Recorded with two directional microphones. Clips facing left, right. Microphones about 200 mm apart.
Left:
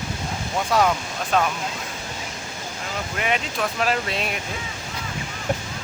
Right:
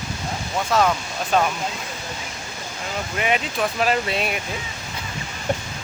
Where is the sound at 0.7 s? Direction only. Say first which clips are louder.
Right 1 dB; 10° left (ahead or behind).